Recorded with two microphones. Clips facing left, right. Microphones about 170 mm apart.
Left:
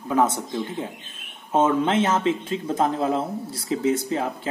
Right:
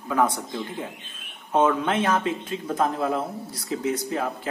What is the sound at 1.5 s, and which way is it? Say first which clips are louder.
A man's voice: left 1 dB; 25° left (ahead or behind).